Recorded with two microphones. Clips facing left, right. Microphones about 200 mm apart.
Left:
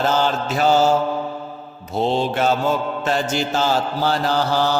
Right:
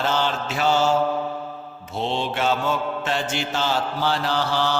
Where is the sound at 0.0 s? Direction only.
40° left (ahead or behind).